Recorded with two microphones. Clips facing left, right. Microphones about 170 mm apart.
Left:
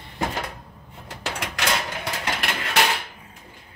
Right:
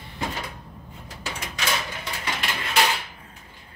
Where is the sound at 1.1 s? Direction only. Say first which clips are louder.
Left 4 dB; 85° left.